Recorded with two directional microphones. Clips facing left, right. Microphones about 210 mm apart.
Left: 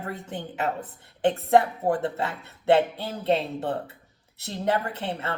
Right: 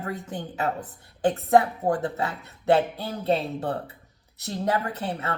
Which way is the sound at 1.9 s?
25° left (ahead or behind).